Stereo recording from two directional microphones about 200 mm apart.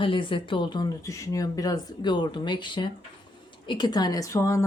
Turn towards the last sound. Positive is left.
turn(degrees=15)  # may be behind; listen again after turning